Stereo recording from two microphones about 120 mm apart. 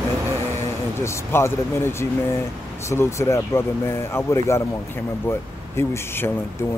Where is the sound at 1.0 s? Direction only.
20° left (ahead or behind).